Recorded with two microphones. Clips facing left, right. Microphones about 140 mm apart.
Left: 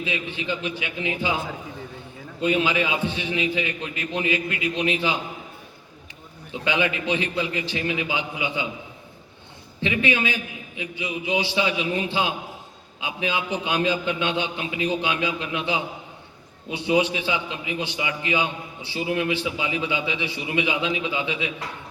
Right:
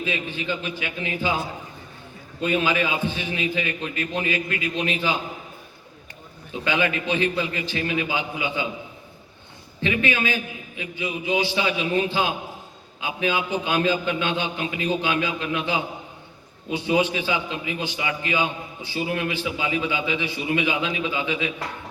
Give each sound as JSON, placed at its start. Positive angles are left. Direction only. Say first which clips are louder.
{"t": 0.3, "sound": "a man's voice", "louder": "even", "side_deg": 20}
{"t": 2.4, "sound": "a man's voice", "louder": "even", "side_deg": 20}
{"t": 6.7, "sound": "a man's voice", "louder": "even", "side_deg": 20}
{"t": 9.8, "sound": "a man's voice", "louder": "even", "side_deg": 20}